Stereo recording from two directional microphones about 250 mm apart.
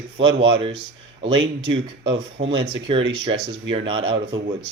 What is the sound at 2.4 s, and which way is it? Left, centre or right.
Speech, right.